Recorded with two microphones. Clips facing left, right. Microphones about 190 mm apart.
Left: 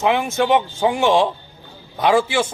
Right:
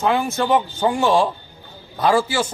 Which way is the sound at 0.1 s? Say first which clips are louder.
Left 1 dB; 15° left (ahead or behind).